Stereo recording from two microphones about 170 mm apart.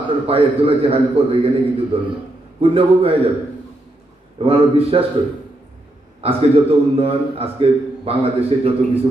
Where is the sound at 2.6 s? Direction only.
35° right (ahead or behind).